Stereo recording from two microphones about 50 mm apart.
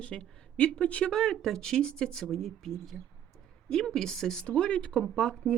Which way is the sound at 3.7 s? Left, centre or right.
Centre.